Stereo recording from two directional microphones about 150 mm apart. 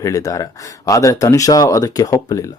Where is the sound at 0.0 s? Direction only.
20° left (ahead or behind).